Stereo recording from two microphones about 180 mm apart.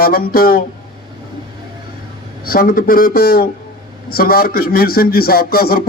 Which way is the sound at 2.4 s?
55° left (ahead or behind).